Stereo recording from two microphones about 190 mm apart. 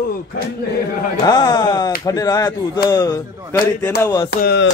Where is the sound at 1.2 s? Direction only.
20° left (ahead or behind).